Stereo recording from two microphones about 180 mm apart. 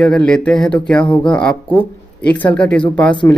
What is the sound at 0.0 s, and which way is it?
Speech, 5° left (ahead or behind).